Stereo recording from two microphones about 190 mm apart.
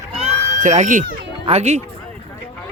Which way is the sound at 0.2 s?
40° right (ahead or behind).